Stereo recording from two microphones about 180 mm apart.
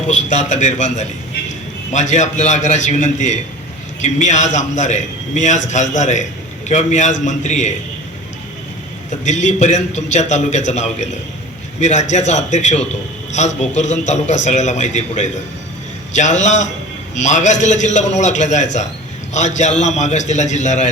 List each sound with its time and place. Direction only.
0.1 s a man's voice: 40° left (ahead or behind)
9.0 s a man's voice: 40° left (ahead or behind)